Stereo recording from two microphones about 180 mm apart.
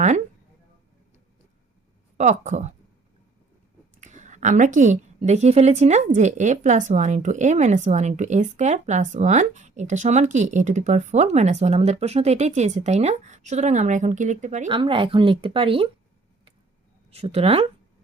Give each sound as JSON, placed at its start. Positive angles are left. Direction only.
{"t": 2.1, "sound": "speech", "side_deg": -40}
{"t": 4.0, "sound": "a woman's voice", "side_deg": -40}
{"t": 14.7, "sound": "speech", "side_deg": -30}
{"t": 17.1, "sound": "speech", "side_deg": -35}